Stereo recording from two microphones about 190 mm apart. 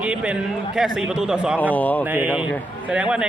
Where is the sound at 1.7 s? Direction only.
10° left (ahead or behind).